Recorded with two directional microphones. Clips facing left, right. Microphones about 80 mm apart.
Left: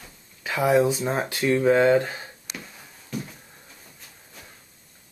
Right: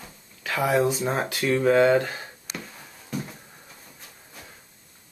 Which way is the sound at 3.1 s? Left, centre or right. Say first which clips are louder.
Right 1 dB; right.